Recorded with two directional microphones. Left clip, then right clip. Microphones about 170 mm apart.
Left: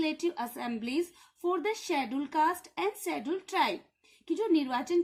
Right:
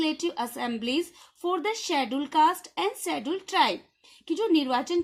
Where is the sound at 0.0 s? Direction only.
40° right (ahead or behind).